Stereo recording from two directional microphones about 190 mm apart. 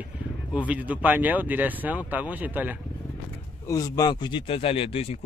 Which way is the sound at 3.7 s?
20° left (ahead or behind).